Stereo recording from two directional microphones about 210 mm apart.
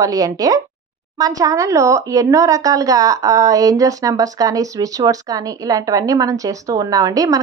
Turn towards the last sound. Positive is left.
turn(degrees=-15)  # may be behind; listen again after turning